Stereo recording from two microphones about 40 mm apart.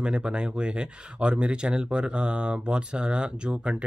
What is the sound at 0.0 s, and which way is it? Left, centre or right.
Speech, right.